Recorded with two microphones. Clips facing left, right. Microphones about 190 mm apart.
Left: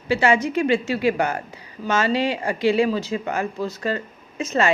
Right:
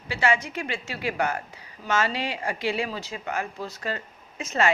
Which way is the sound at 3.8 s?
35° left (ahead or behind).